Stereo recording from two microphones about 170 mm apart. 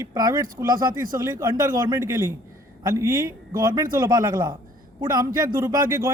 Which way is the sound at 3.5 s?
55° right (ahead or behind).